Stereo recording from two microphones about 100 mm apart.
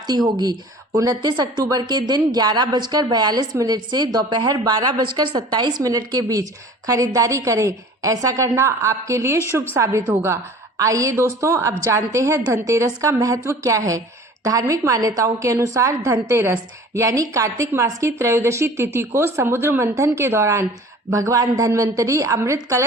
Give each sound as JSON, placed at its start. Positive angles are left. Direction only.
{"t": 0.1, "sound": "speech", "side_deg": -45}
{"t": 1.3, "sound": "a woman's voice", "side_deg": -50}